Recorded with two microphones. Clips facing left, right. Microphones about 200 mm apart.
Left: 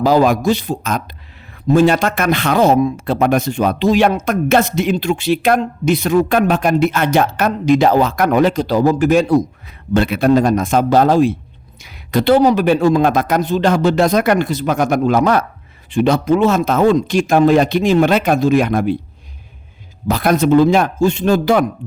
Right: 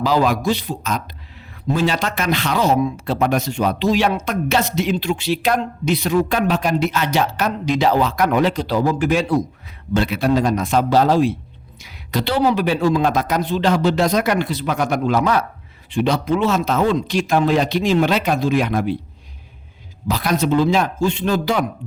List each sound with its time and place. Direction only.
0.0 s speech: 45° left (ahead or behind)
20.1 s speech: 50° left (ahead or behind)